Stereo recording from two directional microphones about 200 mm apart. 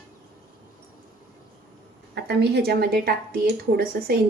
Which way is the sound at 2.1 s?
55° right (ahead or behind).